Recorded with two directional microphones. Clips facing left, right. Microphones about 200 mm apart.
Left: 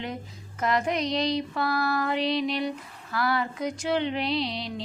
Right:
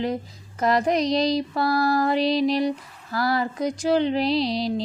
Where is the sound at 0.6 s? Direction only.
35° right (ahead or behind).